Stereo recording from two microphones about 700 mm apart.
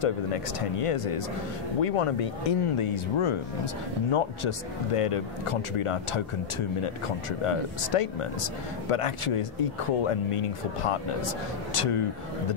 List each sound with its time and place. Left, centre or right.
0.0 s speech: left